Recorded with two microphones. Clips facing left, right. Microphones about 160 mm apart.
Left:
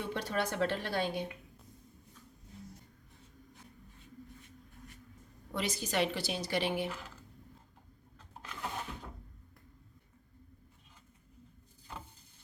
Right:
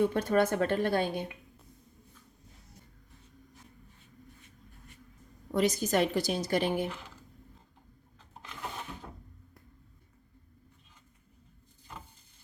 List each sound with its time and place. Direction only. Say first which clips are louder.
0.0 s a woman's voice: right 9 dB; 50° right (ahead or behind)
5.5 s a woman's voice: right 6 dB; 45° right (ahead or behind)
6.8 s speech: right 2 dB; centre (ahead or behind)